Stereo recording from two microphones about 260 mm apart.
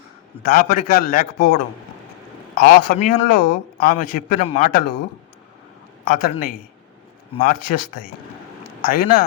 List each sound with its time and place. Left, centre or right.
0.4 s speech: left
2.6 s speech: left
6.1 s speech: left
8.8 s speech: left